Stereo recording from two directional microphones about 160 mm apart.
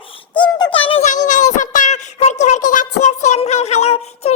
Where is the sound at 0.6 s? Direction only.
35° left (ahead or behind).